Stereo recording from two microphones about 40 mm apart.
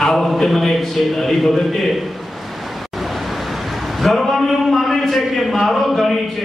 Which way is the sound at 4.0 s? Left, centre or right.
Centre.